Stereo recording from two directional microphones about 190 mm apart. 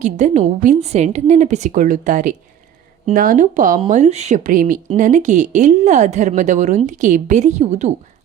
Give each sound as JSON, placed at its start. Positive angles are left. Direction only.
{"t": 0.0, "sound": "speech", "side_deg": -40}